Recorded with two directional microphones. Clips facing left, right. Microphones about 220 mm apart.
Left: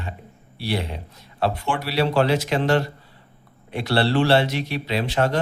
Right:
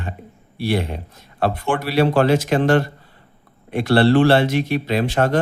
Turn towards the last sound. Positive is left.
turn(degrees=-50)  # may be behind; listen again after turning